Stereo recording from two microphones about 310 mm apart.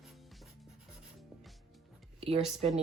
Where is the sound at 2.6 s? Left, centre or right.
Right.